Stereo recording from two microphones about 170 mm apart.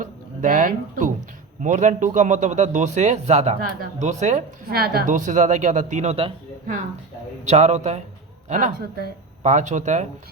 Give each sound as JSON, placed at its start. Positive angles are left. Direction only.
{"t": 0.0, "sound": "a sound", "side_deg": -50}
{"t": 1.6, "sound": "a man's voice", "side_deg": -45}
{"t": 4.7, "sound": "a man's voice", "side_deg": -65}
{"t": 7.4, "sound": "a man's voice", "side_deg": -40}